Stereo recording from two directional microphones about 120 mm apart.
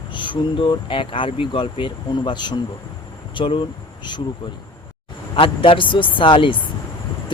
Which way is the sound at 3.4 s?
55° left (ahead or behind).